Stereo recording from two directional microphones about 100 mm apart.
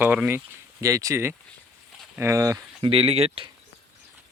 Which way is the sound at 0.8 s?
35° right (ahead or behind).